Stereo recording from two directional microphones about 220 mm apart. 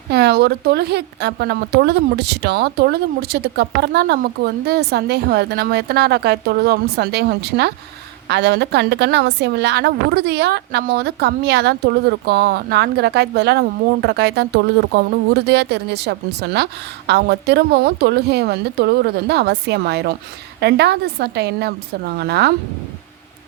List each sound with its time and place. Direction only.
0.1 s a woman's voice: 45° right (ahead or behind)